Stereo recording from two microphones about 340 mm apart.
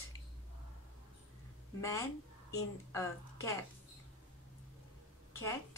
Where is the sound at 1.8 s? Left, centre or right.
Centre.